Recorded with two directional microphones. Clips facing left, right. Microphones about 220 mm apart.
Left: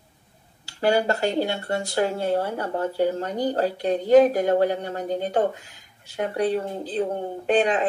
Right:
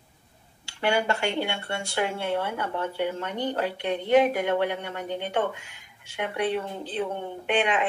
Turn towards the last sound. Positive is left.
turn(degrees=35)  # may be behind; listen again after turning